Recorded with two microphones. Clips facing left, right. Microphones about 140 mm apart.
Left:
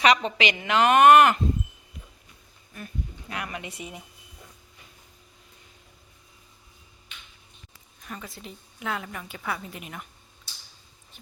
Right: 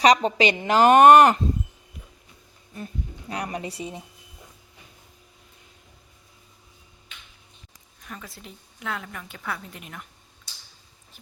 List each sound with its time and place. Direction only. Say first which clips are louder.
0.0 s a woman's voice: right 4 dB; 40° right (ahead or behind)
2.7 s speech: right 2 dB; 30° right (ahead or behind)
8.0 s a woman's voice: left 1 dB; centre (ahead or behind)